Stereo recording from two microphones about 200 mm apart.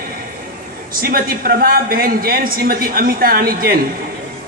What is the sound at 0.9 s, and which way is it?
Speech, 45° right (ahead or behind).